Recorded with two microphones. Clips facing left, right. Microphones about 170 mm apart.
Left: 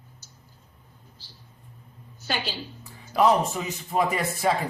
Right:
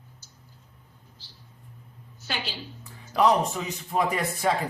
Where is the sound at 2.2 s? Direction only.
45° left (ahead or behind).